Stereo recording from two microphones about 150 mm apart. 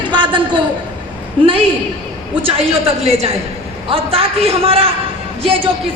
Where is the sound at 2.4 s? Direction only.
40° right (ahead or behind).